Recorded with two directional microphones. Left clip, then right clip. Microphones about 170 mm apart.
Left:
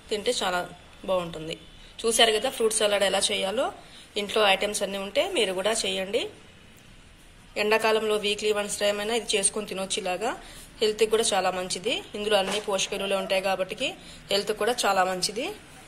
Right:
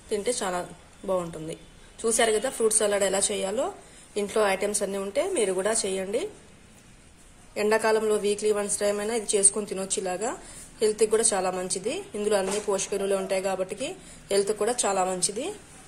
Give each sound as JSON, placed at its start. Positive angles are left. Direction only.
{"t": 0.1, "sound": "a woman's voice", "side_deg": -30}
{"t": 7.5, "sound": "a woman's voice", "side_deg": -30}